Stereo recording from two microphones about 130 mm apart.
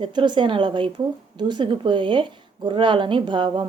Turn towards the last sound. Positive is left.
turn(degrees=-40)  # may be behind; listen again after turning